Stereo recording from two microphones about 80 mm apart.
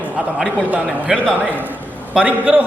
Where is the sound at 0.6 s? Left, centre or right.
Centre.